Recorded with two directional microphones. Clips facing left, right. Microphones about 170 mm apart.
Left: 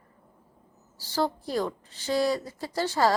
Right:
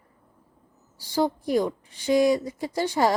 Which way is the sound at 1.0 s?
15° right (ahead or behind).